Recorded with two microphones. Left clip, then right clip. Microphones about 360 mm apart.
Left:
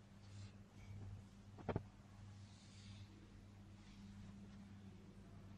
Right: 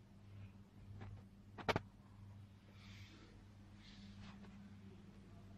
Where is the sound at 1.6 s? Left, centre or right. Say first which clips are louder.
Right 8 dB; right.